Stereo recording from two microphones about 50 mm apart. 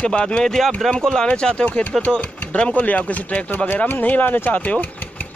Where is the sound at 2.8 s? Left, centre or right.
Left.